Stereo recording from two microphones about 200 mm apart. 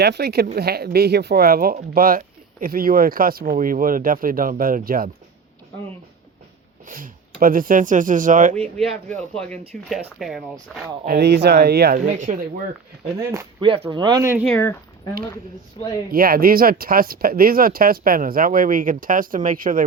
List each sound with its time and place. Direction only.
0.0 s speech: 55° right (ahead or behind)
6.8 s speech: 45° right (ahead or behind)
9.3 s speech: 5° left (ahead or behind)
11.0 s speech: 50° right (ahead or behind)
12.0 s speech: 40° right (ahead or behind)
13.1 s speech: 20° right (ahead or behind)
14.5 s speech: 10° left (ahead or behind)
15.8 s speech: 25° left (ahead or behind)
16.1 s speech: 45° right (ahead or behind)